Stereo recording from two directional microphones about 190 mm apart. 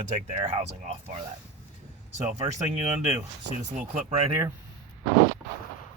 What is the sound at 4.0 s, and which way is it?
Speech, 35° right (ahead or behind).